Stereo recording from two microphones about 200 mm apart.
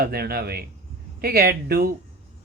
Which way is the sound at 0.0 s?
50° right (ahead or behind).